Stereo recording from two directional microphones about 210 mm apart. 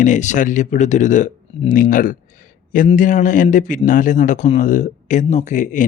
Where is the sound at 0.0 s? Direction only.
35° left (ahead or behind).